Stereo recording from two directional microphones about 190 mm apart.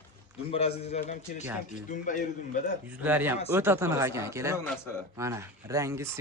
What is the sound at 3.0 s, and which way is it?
Speech, 10° right (ahead or behind).